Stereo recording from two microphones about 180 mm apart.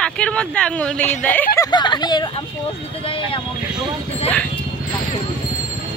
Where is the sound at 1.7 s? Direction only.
25° left (ahead or behind).